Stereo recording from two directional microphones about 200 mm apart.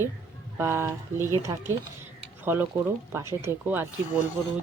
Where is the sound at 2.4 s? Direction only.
10° right (ahead or behind).